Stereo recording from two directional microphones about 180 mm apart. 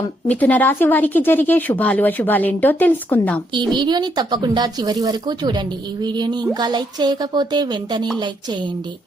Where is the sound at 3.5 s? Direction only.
25° right (ahead or behind).